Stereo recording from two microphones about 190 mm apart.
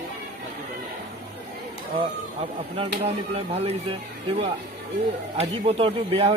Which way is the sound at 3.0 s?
30° right (ahead or behind).